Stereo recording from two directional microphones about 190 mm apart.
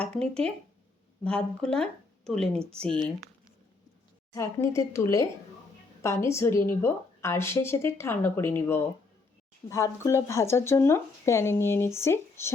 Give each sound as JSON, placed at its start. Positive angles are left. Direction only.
{"t": 0.0, "sound": "speech", "side_deg": 5}
{"t": 4.4, "sound": "a woman's voice", "side_deg": 15}